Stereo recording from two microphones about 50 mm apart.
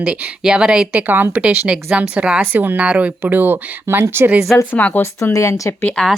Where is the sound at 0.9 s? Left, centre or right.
Right.